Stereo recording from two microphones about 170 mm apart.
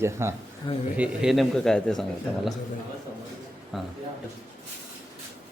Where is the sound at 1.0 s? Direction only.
Centre (ahead or behind).